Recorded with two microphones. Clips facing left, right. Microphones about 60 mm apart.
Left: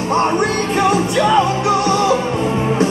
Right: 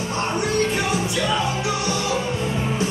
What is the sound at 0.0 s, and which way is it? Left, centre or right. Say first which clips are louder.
Music: left 8 dB; left.